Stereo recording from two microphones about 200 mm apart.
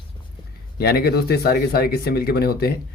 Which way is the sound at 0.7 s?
50° left (ahead or behind).